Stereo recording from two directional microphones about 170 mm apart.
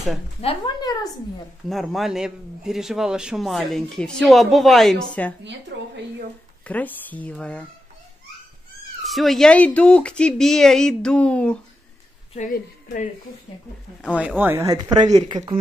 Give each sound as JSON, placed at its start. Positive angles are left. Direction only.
{"t": 0.4, "sound": "speech", "side_deg": 30}
{"t": 1.7, "sound": "a man's voice", "side_deg": 0}
{"t": 5.7, "sound": "speech", "side_deg": -80}
{"t": 6.6, "sound": "speech", "side_deg": 10}
{"t": 9.0, "sound": "a man's voice", "side_deg": 0}
{"t": 12.4, "sound": "a woman's voice", "side_deg": 50}
{"t": 14.1, "sound": "speech", "side_deg": -10}